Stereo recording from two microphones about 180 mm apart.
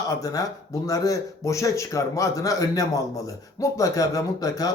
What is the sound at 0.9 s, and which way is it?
A man's voice, 20° left (ahead or behind).